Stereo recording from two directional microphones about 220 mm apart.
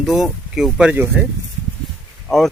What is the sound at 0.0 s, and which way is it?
Speech, centre (ahead or behind).